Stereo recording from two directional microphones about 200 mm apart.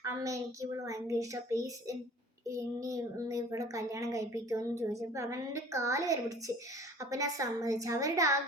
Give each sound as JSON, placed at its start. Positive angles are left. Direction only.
{"t": 0.0, "sound": "speech", "side_deg": -15}